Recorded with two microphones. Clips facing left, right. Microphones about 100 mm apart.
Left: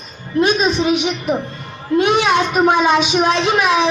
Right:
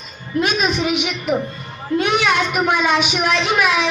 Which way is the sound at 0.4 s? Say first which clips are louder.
Left 4 dB; 30° left (ahead or behind).